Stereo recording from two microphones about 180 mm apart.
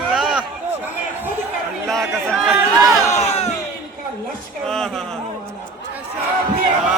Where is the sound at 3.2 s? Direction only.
35° left (ahead or behind).